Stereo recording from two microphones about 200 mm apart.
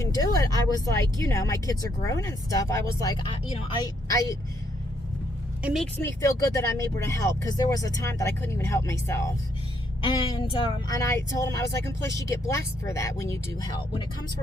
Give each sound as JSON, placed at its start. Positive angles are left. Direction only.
{"t": 0.0, "sound": "speech", "side_deg": 20}
{"t": 5.6, "sound": "speech", "side_deg": 0}
{"t": 6.0, "sound": "speech", "side_deg": 15}
{"t": 10.0, "sound": "a woman's voice", "side_deg": 25}